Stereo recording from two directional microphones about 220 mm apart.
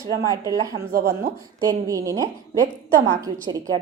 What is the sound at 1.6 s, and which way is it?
A woman's voice, 15° right (ahead or behind).